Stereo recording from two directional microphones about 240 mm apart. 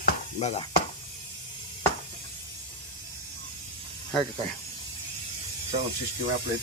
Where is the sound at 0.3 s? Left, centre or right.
Left.